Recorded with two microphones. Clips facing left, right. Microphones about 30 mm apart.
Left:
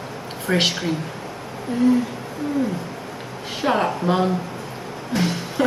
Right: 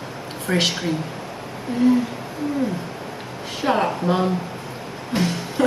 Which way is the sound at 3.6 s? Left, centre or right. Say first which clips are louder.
Even; centre.